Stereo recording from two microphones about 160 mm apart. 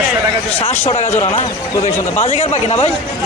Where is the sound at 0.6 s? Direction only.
35° left (ahead or behind).